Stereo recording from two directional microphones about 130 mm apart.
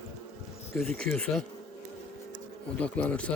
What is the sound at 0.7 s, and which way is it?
Speech, 5° left (ahead or behind).